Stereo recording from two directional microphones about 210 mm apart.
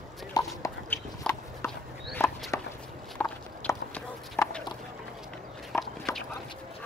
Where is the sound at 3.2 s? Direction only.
5° left (ahead or behind).